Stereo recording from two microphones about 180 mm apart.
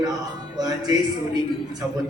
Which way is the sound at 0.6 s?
20° right (ahead or behind).